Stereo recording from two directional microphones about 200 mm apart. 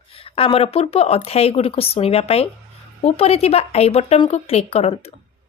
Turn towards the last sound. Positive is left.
turn(degrees=30)  # may be behind; listen again after turning